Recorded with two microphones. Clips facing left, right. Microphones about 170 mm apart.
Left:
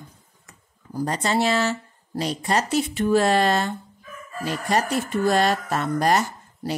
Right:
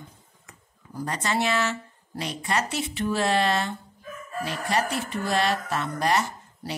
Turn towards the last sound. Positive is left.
turn(degrees=45)  # may be behind; listen again after turning